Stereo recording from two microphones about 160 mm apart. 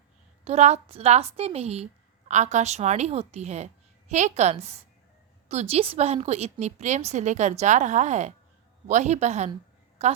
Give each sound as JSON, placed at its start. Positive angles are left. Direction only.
{"t": 0.4, "sound": "speech", "side_deg": -45}